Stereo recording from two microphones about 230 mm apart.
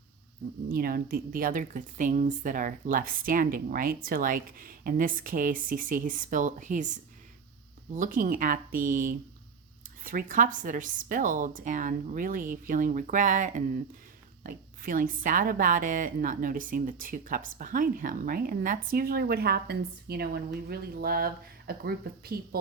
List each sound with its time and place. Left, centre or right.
0.7 s a woman's voice: right